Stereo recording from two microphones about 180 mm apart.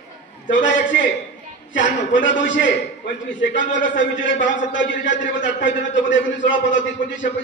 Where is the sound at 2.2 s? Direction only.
90° left.